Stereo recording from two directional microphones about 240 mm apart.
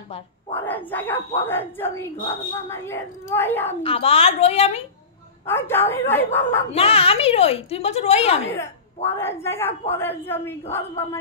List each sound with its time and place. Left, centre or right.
0.6 s a woman's voice: centre
3.8 s a woman's voice: left
5.5 s a woman's voice: centre
6.7 s a woman's voice: left
8.5 s a woman's voice: centre